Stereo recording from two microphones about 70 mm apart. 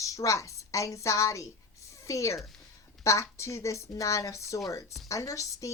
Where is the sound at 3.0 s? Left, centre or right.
Left.